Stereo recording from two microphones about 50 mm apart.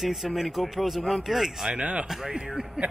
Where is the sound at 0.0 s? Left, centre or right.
Centre.